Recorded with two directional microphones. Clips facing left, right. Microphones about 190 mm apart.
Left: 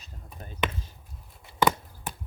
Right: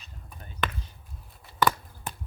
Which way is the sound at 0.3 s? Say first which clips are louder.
Left 2 dB; 25° left (ahead or behind).